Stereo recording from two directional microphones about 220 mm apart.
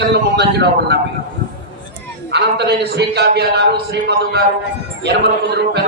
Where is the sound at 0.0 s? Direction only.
50° right (ahead or behind).